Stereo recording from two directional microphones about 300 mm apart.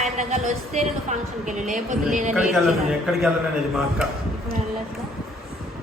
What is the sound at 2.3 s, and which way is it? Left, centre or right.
A man's voice, centre.